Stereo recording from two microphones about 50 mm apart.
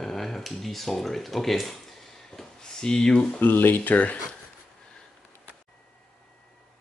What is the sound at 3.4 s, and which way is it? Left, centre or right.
Speech, left.